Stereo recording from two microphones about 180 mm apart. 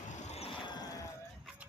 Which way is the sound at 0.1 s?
40° left (ahead or behind).